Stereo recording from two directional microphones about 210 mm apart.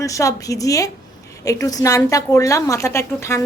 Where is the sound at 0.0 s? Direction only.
15° left (ahead or behind).